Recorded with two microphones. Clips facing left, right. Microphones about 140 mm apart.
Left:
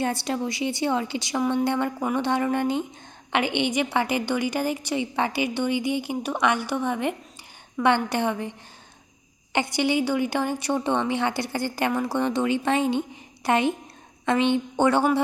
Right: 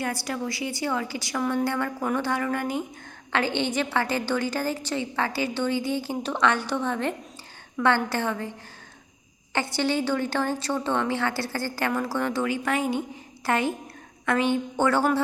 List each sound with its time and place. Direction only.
0.0 s a woman's voice: 25° left (ahead or behind)